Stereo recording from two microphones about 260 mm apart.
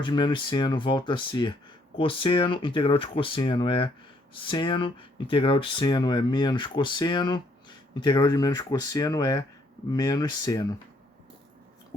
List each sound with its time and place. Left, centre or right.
0.0 s speech: centre